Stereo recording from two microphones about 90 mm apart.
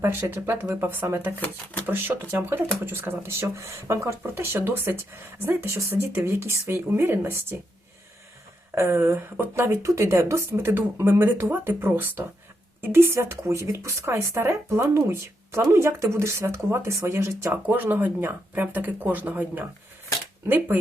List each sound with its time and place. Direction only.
0.0 s speech: 30° right (ahead or behind)
8.7 s speech: 30° right (ahead or behind)